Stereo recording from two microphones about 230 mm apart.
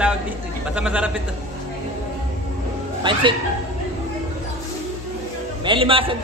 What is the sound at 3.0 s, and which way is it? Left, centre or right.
Speech, right.